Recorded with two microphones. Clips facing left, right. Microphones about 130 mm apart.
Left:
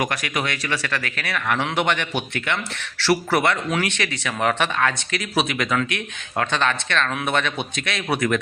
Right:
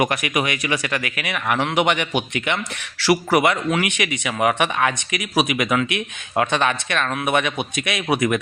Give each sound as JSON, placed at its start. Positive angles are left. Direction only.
{"t": 0.0, "sound": "speech", "side_deg": -20}